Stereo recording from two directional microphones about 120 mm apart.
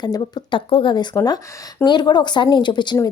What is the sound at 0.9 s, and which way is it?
Speech, 35° left (ahead or behind).